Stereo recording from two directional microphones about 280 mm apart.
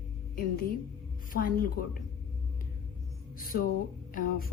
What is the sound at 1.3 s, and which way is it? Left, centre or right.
Speech, left.